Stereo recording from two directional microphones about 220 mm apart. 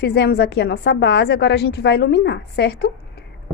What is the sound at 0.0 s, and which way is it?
A woman's voice, 50° left (ahead or behind).